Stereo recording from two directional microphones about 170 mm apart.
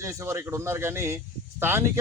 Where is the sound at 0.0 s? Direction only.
15° right (ahead or behind).